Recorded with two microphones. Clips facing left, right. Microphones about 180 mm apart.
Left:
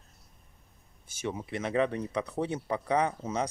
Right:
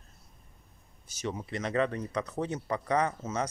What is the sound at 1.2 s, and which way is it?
Speech, 10° left (ahead or behind).